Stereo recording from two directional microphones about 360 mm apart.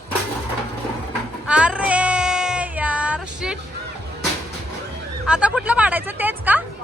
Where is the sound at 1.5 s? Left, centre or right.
Centre.